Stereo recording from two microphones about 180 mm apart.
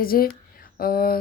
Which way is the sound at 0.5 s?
55° left (ahead or behind).